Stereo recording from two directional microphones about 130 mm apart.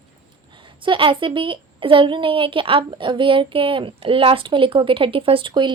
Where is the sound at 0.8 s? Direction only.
40° right (ahead or behind).